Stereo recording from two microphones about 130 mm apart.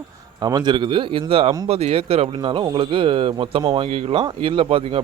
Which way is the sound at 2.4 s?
35° right (ahead or behind).